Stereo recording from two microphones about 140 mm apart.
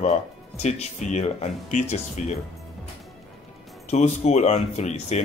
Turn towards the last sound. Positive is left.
turn(degrees=55)  # may be behind; listen again after turning